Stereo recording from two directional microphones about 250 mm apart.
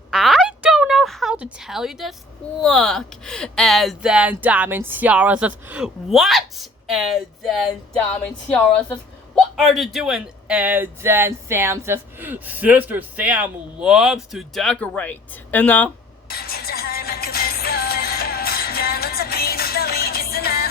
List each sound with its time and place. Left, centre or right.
0.1 s a sound: centre
2.6 s speech: centre
16.3 s music: left